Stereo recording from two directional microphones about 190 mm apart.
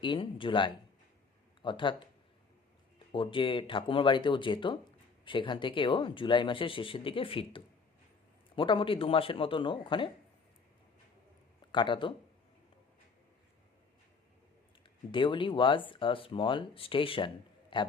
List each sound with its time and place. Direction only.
0.0 s speech: 25° left (ahead or behind)
3.1 s speech: 25° left (ahead or behind)
11.7 s speech: 25° left (ahead or behind)
14.8 s speech: 25° left (ahead or behind)